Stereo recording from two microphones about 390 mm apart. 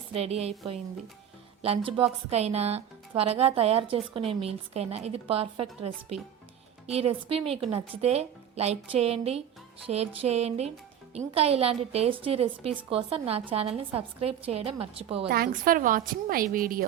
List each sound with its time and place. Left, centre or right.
0.1 s a woman's voice: centre
1.6 s a woman's voice: centre